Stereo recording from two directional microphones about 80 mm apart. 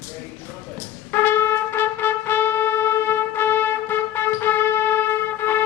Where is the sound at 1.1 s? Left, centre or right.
Left.